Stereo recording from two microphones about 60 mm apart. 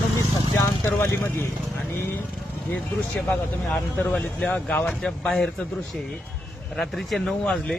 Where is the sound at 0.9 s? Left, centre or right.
Left.